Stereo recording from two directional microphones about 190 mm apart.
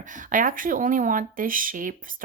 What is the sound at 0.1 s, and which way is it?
Speech, 45° right (ahead or behind).